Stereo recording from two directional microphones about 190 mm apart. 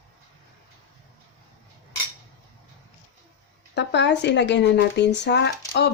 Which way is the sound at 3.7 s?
65° left (ahead or behind).